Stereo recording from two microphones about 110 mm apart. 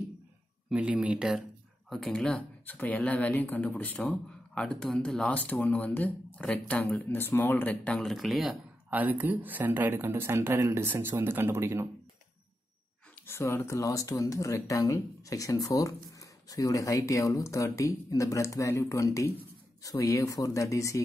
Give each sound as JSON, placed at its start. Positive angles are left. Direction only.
{"t": 0.7, "sound": "speech", "side_deg": -10}
{"t": 1.9, "sound": "speech", "side_deg": 5}
{"t": 8.9, "sound": "speech", "side_deg": -15}
{"t": 13.3, "sound": "speech", "side_deg": 25}